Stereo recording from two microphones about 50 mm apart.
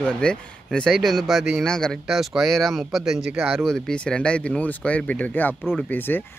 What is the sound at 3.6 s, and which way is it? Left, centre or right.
Speech, centre.